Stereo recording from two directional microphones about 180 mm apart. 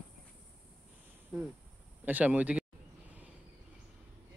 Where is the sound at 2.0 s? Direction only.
10° right (ahead or behind).